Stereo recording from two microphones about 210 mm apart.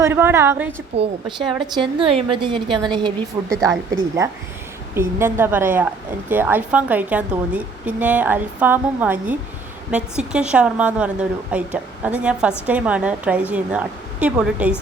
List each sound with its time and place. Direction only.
0.0 s a woman's voice: 10° right (ahead or behind)
0.9 s a woman's voice: 30° right (ahead or behind)
1.4 s a woman's voice: centre (ahead or behind)
1.6 s a woman's voice: 20° right (ahead or behind); by 14.8 s 5° right (ahead or behind)